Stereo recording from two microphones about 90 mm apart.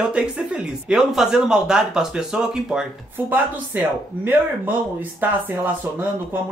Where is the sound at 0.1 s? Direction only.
10° right (ahead or behind).